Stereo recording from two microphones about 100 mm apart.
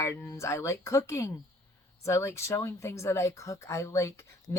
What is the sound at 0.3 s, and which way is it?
Speech, 30° left (ahead or behind).